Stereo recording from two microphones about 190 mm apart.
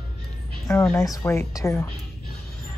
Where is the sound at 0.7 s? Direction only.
15° left (ahead or behind).